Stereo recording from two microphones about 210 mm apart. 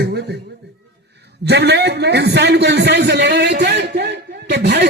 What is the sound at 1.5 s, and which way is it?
A man's voice, 55° right (ahead or behind).